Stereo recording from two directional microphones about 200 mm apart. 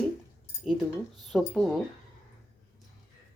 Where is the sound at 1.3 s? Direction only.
Centre (ahead or behind).